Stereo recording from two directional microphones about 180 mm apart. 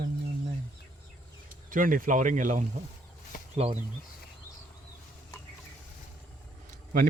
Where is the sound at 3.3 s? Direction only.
50° left (ahead or behind).